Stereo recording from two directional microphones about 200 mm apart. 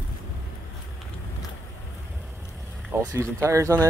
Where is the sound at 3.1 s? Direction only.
15° right (ahead or behind).